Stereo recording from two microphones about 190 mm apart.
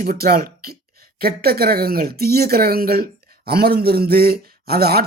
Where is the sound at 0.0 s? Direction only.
50° right (ahead or behind).